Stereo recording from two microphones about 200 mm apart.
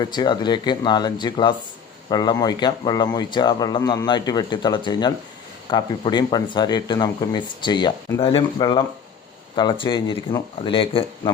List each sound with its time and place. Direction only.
0.0 s a man's voice: 20° left (ahead or behind)